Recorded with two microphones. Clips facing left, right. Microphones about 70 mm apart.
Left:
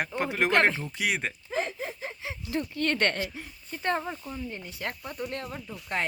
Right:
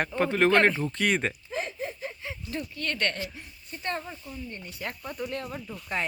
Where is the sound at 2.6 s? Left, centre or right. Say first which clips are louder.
Left 4 dB; left.